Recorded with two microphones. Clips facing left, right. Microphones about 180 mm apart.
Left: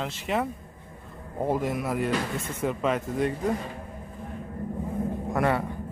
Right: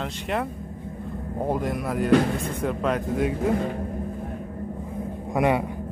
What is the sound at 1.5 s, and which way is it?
Speech, centre (ahead or behind).